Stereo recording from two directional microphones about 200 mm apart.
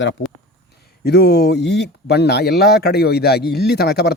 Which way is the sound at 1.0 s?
55° left (ahead or behind).